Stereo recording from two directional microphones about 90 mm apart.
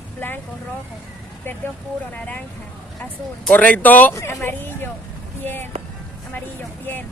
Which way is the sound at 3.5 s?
20° left (ahead or behind).